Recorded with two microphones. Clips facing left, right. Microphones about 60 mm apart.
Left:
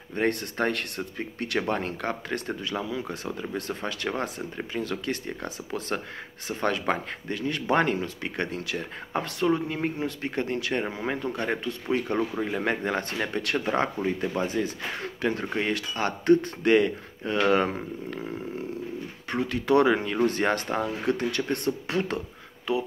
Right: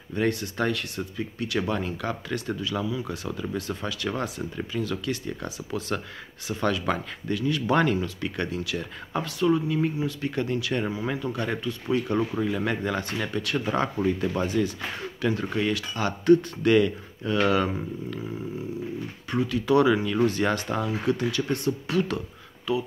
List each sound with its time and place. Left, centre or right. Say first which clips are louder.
0.1 s speech: even; left
10.2 s speech: even; left
10.9 s speech: right 1 dB; left
14.3 s speech: right 2 dB; left